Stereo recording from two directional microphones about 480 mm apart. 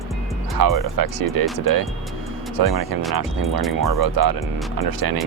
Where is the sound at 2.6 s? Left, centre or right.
Right.